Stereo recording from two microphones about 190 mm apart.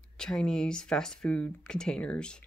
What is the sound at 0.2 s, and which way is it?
Speech, 5° left (ahead or behind).